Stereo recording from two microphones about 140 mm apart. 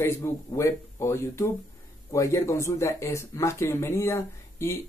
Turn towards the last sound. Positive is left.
turn(degrees=20)  # may be behind; listen again after turning